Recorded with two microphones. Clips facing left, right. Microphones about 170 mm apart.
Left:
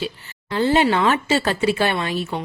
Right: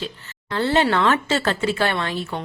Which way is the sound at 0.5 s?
15° left (ahead or behind).